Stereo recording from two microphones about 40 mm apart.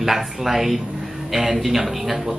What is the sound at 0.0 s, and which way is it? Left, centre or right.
A man's voice, centre.